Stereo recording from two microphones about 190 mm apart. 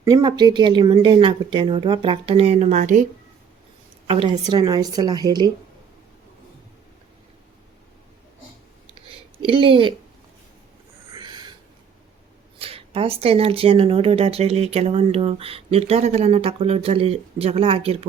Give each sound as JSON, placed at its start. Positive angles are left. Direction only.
{"t": 0.0, "sound": "speech", "side_deg": -20}
{"t": 4.0, "sound": "a woman's voice", "side_deg": -30}
{"t": 9.5, "sound": "speech", "side_deg": -30}
{"t": 11.1, "sound": "a sound", "side_deg": -25}
{"t": 12.5, "sound": "speech", "side_deg": -30}